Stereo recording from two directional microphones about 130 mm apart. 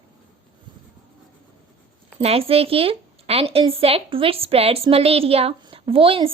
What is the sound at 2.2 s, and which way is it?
A woman's voice, 50° right (ahead or behind).